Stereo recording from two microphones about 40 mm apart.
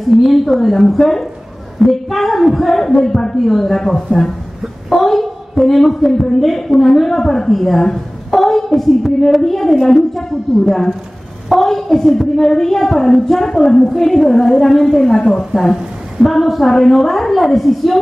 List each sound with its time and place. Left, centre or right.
0.2 s a woman's voice: centre
3.1 s a woman's voice: centre
3.3 s a woman's voice: centre